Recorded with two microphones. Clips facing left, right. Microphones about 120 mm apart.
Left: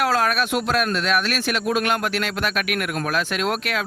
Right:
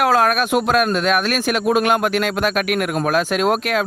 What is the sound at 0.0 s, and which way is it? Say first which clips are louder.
Speech: right 5 dB; 50° right (ahead or behind).